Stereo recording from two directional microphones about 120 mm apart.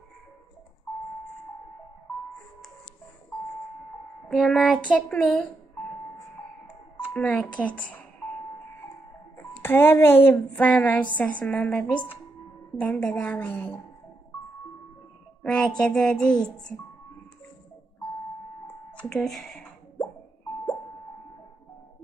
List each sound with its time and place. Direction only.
4.3 s a woman's voice: centre (ahead or behind)
7.2 s a woman's voice: 10° left (ahead or behind)
9.6 s a woman's voice: 20° left (ahead or behind)
15.4 s a woman's voice: 5° left (ahead or behind)
15.8 s a sound: 5° left (ahead or behind)
18.9 s speech: 10° left (ahead or behind)